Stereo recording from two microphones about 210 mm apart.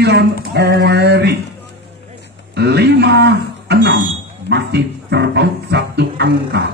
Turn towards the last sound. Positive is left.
turn(degrees=-55)  # may be behind; listen again after turning